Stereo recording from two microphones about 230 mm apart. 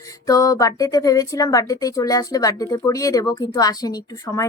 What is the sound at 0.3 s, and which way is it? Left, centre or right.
A woman's voice, centre.